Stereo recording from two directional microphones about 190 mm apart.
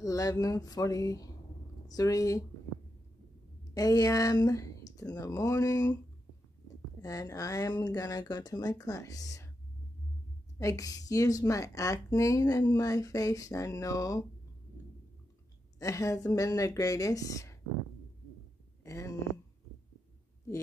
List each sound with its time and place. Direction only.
0.0 s speech: 20° left (ahead or behind)
3.7 s speech: 20° left (ahead or behind)
7.0 s speech: 15° left (ahead or behind)
10.6 s speech: 20° left (ahead or behind)
15.8 s speech: 15° left (ahead or behind)
18.9 s a sound: 15° left (ahead or behind)